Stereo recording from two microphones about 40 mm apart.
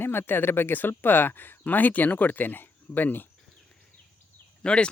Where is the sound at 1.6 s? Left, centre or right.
Left.